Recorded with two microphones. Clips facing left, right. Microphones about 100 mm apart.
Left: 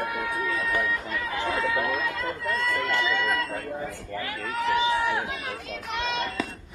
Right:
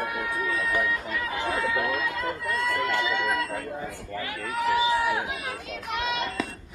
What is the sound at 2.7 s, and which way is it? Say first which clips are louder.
Speech: even; 15° right (ahead or behind).